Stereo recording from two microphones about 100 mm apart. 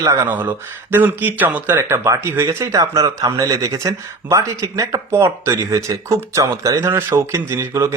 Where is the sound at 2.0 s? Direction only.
30° right (ahead or behind).